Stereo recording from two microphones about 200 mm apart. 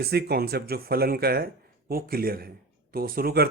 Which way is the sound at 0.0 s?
50° right (ahead or behind).